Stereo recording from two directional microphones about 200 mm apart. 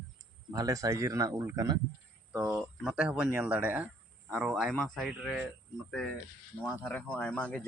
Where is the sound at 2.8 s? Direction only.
Centre (ahead or behind).